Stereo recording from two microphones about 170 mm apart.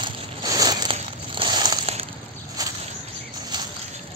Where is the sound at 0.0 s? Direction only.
25° right (ahead or behind).